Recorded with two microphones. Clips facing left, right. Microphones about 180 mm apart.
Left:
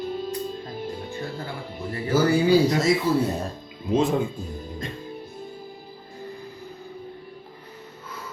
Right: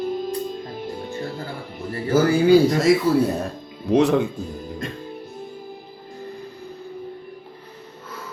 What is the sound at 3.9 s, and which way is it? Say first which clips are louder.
Speech: right 5 dB; 70° right (ahead or behind).